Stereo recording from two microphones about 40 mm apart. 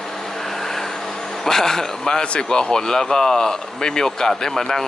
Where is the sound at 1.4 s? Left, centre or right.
Centre.